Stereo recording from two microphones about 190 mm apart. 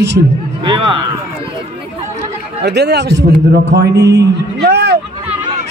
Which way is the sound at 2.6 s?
60° right (ahead or behind).